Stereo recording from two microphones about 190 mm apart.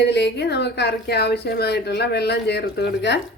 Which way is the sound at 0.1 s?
65° left (ahead or behind).